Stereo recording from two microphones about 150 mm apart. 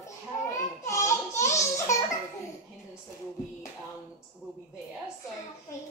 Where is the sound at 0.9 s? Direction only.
20° left (ahead or behind).